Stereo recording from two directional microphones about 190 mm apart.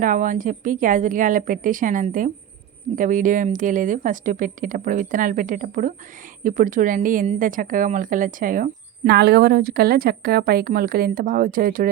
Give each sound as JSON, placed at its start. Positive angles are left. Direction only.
{"t": 0.0, "sound": "a woman's voice", "side_deg": -45}